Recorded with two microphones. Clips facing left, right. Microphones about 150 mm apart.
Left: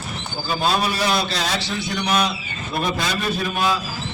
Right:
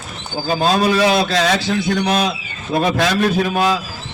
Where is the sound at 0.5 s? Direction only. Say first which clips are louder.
Right 5 dB; 45° right (ahead or behind).